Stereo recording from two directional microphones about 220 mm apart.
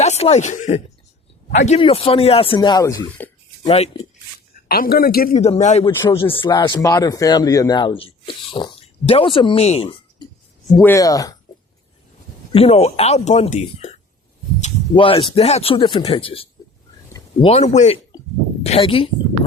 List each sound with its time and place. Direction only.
0.0 s speech: 30° left (ahead or behind)
3.7 s speech: 30° left (ahead or behind)
4.5 s speech: 40° left (ahead or behind)
6.0 s speech: 20° left (ahead or behind)
10.8 s speech: 10° left (ahead or behind)
12.5 s speech: 25° left (ahead or behind)